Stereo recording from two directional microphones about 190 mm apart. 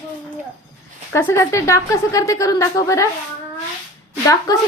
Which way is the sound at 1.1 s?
15° left (ahead or behind).